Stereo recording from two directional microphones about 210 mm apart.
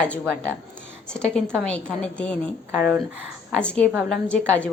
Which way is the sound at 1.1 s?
5° left (ahead or behind).